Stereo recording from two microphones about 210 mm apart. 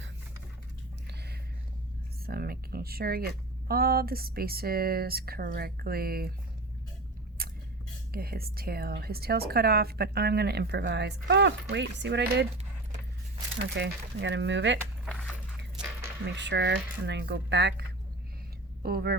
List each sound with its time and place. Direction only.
1.0 s a sound: 50° right (ahead or behind)
2.2 s a woman's voice: 45° right (ahead or behind)
7.4 s a sound: 45° right (ahead or behind)
8.1 s a woman's voice: 45° right (ahead or behind)
13.7 s speech: 55° right (ahead or behind)
16.2 s speech: 55° right (ahead or behind)